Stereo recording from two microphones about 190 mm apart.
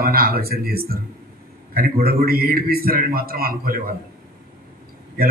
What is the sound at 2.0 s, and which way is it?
A man's voice, 50° right (ahead or behind).